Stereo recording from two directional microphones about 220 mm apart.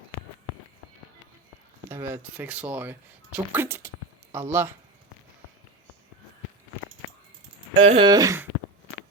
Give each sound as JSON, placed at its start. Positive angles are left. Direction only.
{"t": 1.9, "sound": "speech", "side_deg": -10}
{"t": 7.7, "sound": "speech", "side_deg": -25}